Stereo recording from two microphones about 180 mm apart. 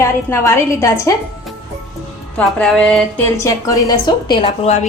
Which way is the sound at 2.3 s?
5° left (ahead or behind).